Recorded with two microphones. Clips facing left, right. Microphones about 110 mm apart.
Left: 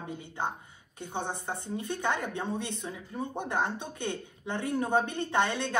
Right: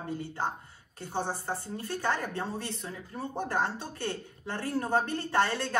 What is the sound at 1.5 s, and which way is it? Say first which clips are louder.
Speech: left 1 dB; 20° left (ahead or behind).